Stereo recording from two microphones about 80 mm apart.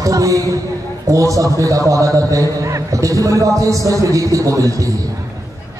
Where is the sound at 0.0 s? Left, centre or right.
Right.